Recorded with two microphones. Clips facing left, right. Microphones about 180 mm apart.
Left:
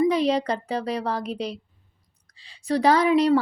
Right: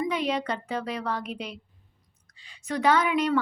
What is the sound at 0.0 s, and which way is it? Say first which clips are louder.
A woman's voice: left 7 dB; 35° left (ahead or behind).